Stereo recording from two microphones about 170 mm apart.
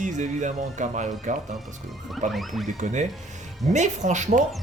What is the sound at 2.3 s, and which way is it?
Speech, centre (ahead or behind).